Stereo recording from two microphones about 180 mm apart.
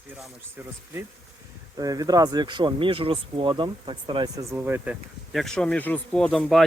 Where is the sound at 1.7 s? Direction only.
20° right (ahead or behind).